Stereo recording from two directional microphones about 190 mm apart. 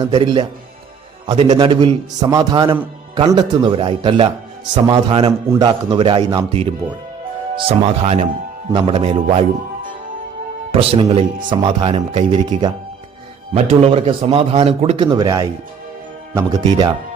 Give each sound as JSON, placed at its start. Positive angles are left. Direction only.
{"t": 0.0, "sound": "a man's voice", "side_deg": -25}
{"t": 10.7, "sound": "a man's voice", "side_deg": -30}
{"t": 13.5, "sound": "a man's voice", "side_deg": -35}